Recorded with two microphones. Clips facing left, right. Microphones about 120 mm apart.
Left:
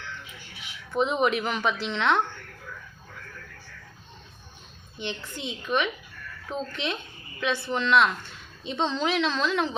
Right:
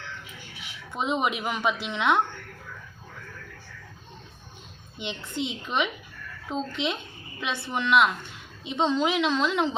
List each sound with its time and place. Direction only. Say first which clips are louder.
0.9 s a woman's voice: left 3 dB; 15° right (ahead or behind)
4.9 s a woman's voice: right 3 dB; 20° right (ahead or behind)